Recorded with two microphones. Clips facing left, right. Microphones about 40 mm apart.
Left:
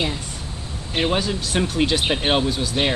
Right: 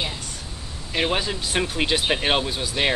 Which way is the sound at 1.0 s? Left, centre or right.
Centre.